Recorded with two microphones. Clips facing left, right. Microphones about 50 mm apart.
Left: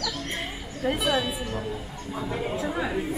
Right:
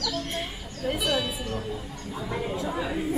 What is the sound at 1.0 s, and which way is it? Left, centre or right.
Speech, centre.